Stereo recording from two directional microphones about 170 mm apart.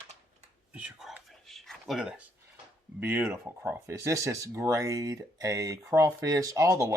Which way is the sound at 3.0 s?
10° right (ahead or behind).